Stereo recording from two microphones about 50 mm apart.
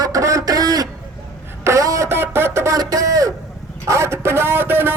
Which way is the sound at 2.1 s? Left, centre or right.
Right.